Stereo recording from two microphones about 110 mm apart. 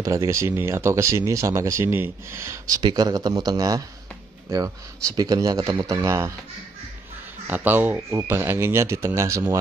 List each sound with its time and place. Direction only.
0.0 s speech: 25° right (ahead or behind)
7.4 s speech: 15° right (ahead or behind)